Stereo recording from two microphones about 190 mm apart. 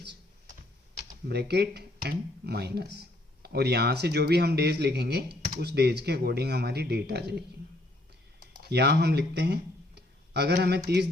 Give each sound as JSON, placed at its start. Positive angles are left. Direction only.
{"t": 1.3, "sound": "speech", "side_deg": -60}
{"t": 8.7, "sound": "speech", "side_deg": -60}